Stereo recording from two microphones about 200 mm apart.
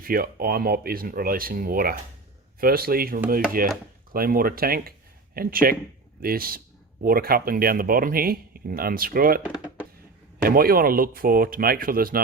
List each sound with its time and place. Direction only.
0.0 s speech: 45° right (ahead or behind)
10.4 s speech: 45° right (ahead or behind)